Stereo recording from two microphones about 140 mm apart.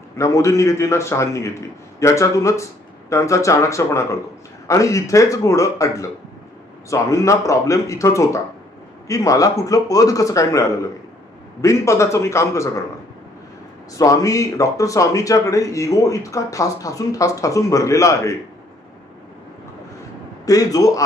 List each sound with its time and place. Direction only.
0.2 s speech: 20° left (ahead or behind)
11.6 s speech: 20° left (ahead or behind)
13.9 s speech: 25° left (ahead or behind)
20.4 s speech: 25° left (ahead or behind)